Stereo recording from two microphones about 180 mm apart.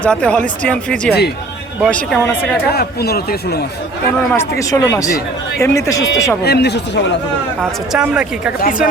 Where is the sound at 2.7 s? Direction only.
60° left (ahead or behind).